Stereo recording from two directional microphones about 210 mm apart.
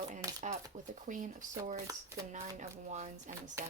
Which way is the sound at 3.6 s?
15° right (ahead or behind).